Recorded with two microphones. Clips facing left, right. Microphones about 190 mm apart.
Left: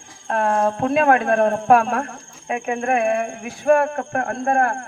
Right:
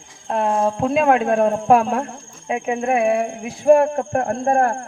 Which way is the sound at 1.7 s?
25° right (ahead or behind).